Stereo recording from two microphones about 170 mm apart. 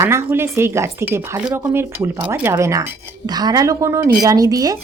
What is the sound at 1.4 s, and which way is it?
Speech, 5° right (ahead or behind).